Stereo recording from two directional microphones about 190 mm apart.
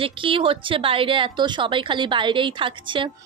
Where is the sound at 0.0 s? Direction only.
30° right (ahead or behind).